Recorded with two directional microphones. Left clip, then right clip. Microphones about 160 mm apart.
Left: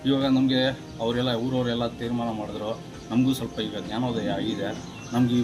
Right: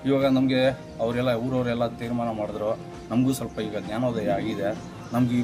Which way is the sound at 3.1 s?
30° right (ahead or behind).